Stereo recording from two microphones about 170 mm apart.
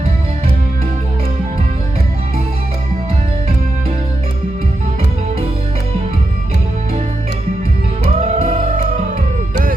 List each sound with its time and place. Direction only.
8.2 s music: 45° right (ahead or behind)